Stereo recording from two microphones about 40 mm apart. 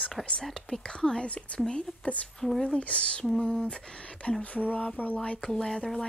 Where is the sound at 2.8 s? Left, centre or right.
Left.